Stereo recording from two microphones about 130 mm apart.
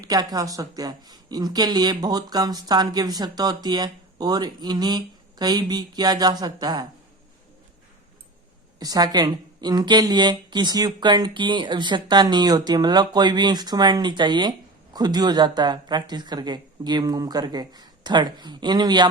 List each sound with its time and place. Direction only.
0.0 s speech: 30° right (ahead or behind)
8.8 s speech: 30° right (ahead or behind)